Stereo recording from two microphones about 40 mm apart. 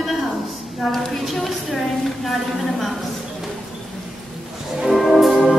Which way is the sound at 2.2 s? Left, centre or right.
Centre.